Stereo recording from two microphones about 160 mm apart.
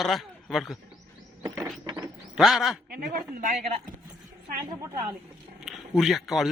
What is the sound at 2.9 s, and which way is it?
Speech, 65° right (ahead or behind).